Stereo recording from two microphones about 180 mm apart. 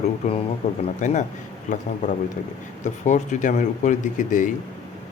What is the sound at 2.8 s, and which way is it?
A man's voice, 40° left (ahead or behind).